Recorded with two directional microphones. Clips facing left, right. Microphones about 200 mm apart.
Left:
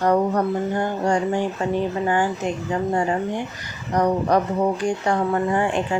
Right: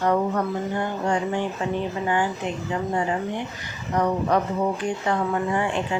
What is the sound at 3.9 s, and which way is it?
Speech, 40° left (ahead or behind).